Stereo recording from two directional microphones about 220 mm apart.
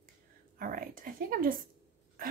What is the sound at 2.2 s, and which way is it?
Dog, 40° right (ahead or behind).